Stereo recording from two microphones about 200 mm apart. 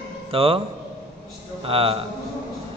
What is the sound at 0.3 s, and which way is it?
Speech, 30° right (ahead or behind).